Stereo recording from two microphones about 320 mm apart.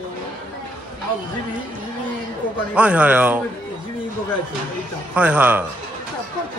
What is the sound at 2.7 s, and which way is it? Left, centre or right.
Speech, centre.